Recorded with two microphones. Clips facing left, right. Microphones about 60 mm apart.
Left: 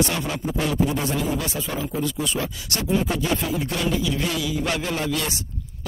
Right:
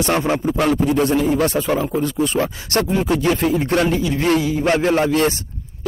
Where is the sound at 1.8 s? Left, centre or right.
Right.